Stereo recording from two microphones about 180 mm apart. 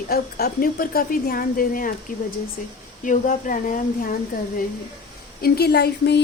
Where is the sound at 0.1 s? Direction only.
60° left (ahead or behind).